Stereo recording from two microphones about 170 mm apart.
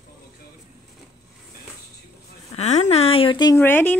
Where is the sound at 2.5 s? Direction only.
40° left (ahead or behind).